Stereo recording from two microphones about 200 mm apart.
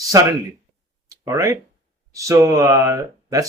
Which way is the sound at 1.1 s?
15° right (ahead or behind).